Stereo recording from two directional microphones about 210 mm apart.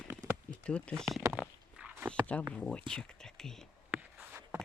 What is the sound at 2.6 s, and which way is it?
Speech, 5° left (ahead or behind).